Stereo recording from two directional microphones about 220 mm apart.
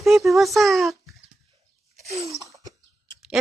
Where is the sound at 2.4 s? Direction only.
15° right (ahead or behind).